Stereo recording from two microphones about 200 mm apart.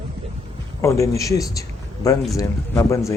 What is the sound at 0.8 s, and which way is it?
A man's voice, 15° left (ahead or behind).